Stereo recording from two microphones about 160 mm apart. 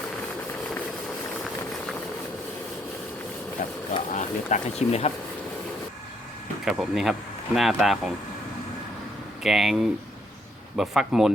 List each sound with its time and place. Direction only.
3.6 s speech: 50° left (ahead or behind)
6.7 s speech: centre (ahead or behind)
9.4 s speech: centre (ahead or behind)